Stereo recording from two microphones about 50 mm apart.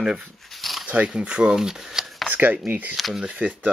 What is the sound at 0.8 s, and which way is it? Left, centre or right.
Speech, right.